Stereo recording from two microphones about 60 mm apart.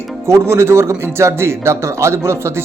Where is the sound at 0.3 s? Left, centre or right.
Right.